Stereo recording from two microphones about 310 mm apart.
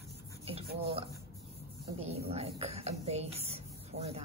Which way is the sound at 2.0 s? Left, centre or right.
Centre.